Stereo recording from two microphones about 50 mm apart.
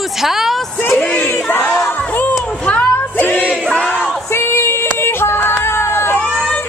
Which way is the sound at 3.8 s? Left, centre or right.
Left.